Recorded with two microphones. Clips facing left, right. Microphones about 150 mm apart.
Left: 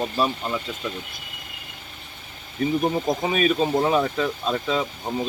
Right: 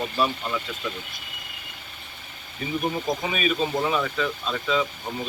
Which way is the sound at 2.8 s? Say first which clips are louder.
Left 4 dB; 40° left (ahead or behind).